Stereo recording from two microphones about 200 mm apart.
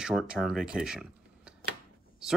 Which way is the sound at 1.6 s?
50° right (ahead or behind).